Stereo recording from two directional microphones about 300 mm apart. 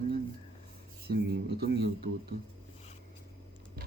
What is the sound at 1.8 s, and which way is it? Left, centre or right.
Speech, right.